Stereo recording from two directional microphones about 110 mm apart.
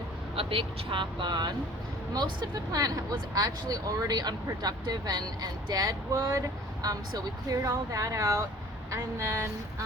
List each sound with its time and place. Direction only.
0.3 s speech: 55° right (ahead or behind); by 9.5 s 25° right (ahead or behind)